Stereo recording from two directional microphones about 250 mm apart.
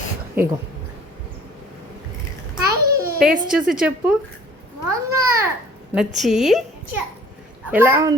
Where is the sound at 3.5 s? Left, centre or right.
Centre.